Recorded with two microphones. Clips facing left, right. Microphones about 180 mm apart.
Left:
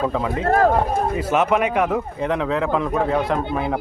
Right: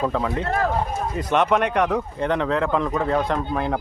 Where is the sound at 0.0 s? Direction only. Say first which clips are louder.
Left 1 dB; centre (ahead or behind).